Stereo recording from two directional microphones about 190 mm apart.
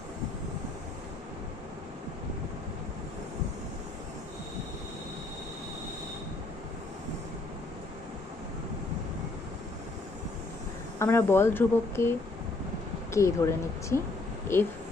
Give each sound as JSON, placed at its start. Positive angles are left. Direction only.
{"t": 11.0, "sound": "speech", "side_deg": 10}